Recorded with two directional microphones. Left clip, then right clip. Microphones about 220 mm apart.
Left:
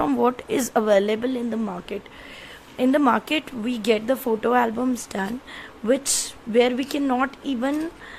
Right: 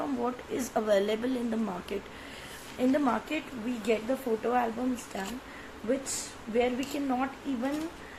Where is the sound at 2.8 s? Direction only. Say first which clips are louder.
Left 8 dB; 40° left (ahead or behind).